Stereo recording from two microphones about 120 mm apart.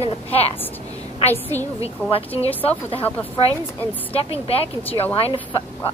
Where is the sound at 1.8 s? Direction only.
55° left (ahead or behind).